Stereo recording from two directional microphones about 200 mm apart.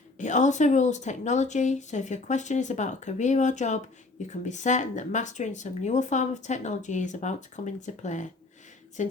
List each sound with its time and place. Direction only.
0.2 s speech: 35° left (ahead or behind)